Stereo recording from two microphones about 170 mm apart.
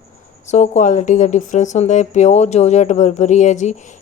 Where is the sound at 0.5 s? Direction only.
45° left (ahead or behind).